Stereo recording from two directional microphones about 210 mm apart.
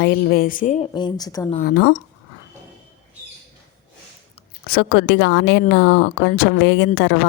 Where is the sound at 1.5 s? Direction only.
35° left (ahead or behind).